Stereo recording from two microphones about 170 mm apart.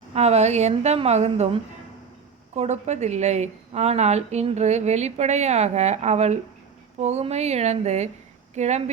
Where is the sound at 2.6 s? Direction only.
40° right (ahead or behind).